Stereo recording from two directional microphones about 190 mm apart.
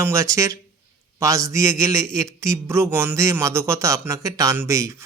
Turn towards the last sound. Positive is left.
turn(degrees=-15)  # may be behind; listen again after turning